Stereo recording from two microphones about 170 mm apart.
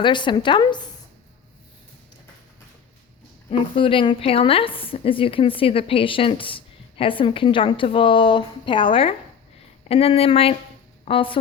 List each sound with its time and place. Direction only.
0.0 s a woman's voice: 30° left (ahead or behind)
3.8 s a woman's voice: 30° left (ahead or behind)